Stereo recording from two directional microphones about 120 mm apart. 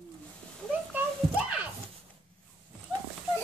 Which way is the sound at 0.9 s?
10° right (ahead or behind).